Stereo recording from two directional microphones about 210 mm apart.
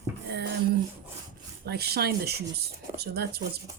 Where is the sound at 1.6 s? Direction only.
50° right (ahead or behind).